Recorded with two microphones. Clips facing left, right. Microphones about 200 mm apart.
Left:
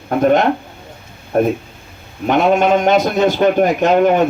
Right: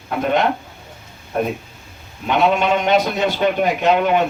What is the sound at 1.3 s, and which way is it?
A man's voice, 50° left (ahead or behind).